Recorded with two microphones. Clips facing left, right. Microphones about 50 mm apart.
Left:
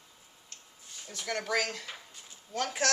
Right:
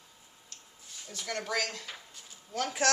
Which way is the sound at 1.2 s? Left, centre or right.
Centre.